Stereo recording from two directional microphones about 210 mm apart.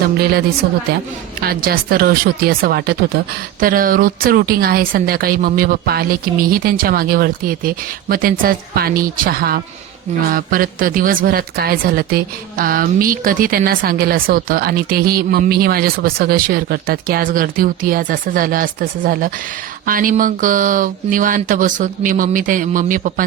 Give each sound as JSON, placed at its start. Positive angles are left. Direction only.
{"t": 0.6, "sound": "speech", "side_deg": -55}